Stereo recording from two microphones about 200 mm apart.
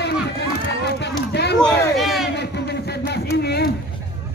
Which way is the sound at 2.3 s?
55° left (ahead or behind).